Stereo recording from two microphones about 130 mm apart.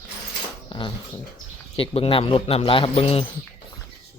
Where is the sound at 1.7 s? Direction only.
45° left (ahead or behind).